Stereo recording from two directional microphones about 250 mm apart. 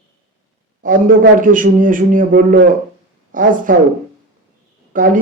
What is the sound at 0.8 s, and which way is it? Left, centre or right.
A man's voice, right.